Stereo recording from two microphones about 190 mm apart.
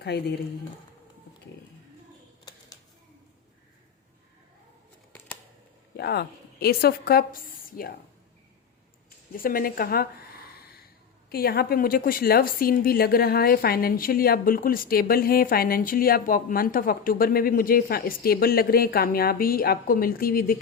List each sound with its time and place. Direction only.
0.1 s a woman's voice: 60° left (ahead or behind)
2.4 s music: 20° left (ahead or behind)
6.0 s a woman's voice: 55° left (ahead or behind)
9.3 s a woman's voice: 50° left (ahead or behind)
11.3 s a woman's voice: 55° left (ahead or behind)